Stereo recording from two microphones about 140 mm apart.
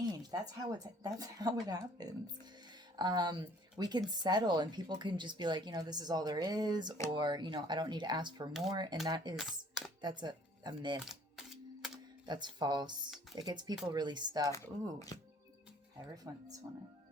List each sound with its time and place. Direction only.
0.0 s a woman's voice: 30° right (ahead or behind)
9.3 s speech: centre (ahead or behind)
10.0 s speech: 30° right (ahead or behind)
11.0 s typewriter: centre (ahead or behind)
12.2 s a woman's voice: 30° right (ahead or behind)
14.5 s speech: 20° left (ahead or behind)
16.1 s speech: 25° right (ahead or behind)